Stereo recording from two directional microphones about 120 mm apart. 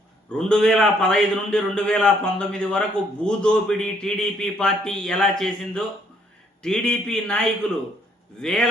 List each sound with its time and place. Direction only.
0.3 s a man's voice: 5° left (ahead or behind)